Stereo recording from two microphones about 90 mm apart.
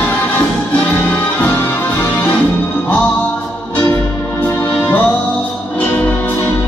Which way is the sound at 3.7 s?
20° left (ahead or behind).